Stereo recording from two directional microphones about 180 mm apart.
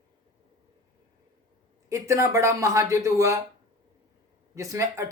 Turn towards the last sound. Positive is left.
turn(degrees=-15)  # may be behind; listen again after turning